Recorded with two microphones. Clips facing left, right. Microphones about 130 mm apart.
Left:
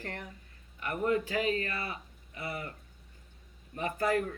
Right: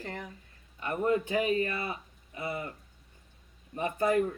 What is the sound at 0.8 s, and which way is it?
Speech, 25° right (ahead or behind).